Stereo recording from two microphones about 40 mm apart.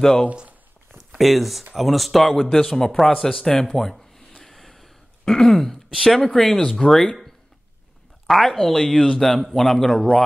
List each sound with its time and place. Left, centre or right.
0.0 s speech: centre
0.9 s speech: centre
4.4 s gasp: centre
5.2 s speech: centre
8.3 s speech: centre
8.5 s speech: centre
9.4 s speech: centre